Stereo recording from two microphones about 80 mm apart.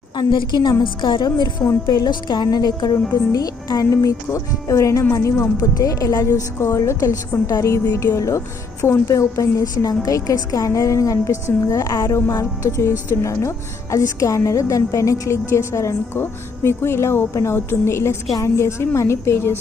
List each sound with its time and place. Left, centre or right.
0.2 s speech: left
3.8 s a woman's voice: left